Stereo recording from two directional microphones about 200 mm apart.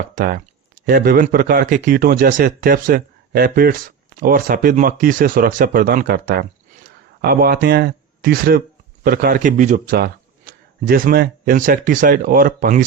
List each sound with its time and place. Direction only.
0.1 s a man's voice: 40° right (ahead or behind)